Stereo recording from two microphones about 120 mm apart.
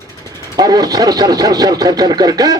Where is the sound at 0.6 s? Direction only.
35° right (ahead or behind).